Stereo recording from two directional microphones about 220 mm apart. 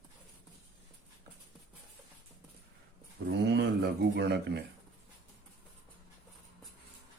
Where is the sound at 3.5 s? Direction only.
50° right (ahead or behind).